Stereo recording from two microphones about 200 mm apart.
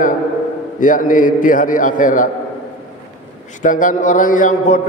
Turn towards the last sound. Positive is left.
turn(degrees=40)  # may be behind; listen again after turning